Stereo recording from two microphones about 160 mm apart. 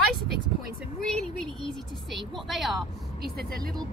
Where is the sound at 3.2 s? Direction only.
75° right (ahead or behind).